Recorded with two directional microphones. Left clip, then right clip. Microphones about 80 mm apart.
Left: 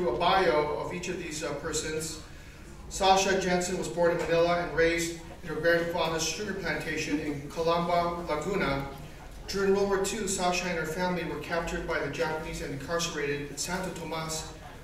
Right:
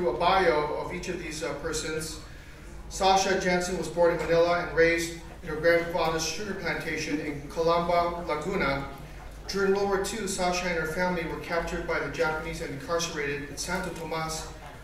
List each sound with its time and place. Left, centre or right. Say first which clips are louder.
0.0 s speech: right 2 dB; centre